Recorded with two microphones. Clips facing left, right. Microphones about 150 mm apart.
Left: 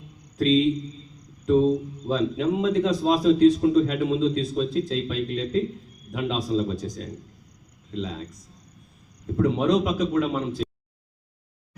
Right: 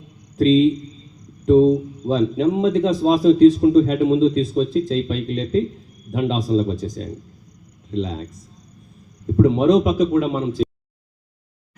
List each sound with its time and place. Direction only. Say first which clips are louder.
0.3 s a man's voice: right 6 dB; 30° right (ahead or behind)
9.4 s a man's voice: right 7 dB; 25° right (ahead or behind)